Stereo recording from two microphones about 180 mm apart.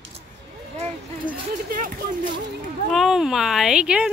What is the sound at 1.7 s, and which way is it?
Speech, 50° right (ahead or behind).